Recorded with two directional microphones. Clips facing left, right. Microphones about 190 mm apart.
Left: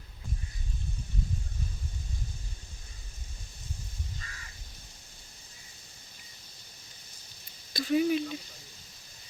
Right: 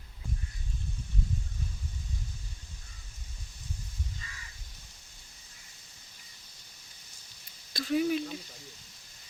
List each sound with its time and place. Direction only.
4.2 s crow: 45° left (ahead or behind)
7.7 s speech: centre (ahead or behind)